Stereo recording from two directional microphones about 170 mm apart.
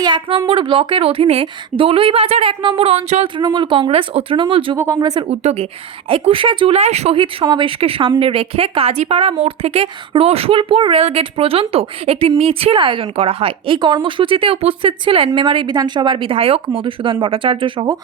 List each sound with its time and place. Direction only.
0.0 s a woman's voice: 30° right (ahead or behind)
3.3 s speech: 30° right (ahead or behind)
4.8 s speech: 20° right (ahead or behind)
5.3 s a woman's voice: 40° right (ahead or behind)